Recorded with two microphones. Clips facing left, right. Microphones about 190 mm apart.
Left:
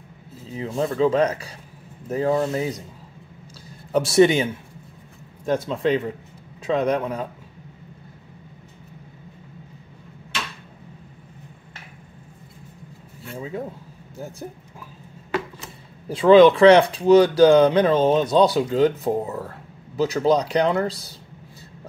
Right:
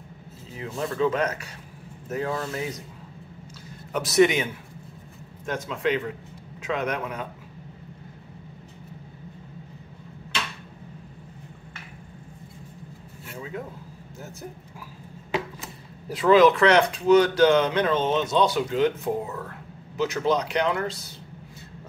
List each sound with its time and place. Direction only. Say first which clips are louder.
0.6 s speech: left 5 dB; 30° left (ahead or behind)
3.9 s speech: left 4 dB; 30° left (ahead or behind)
16.1 s speech: left 5 dB; 30° left (ahead or behind)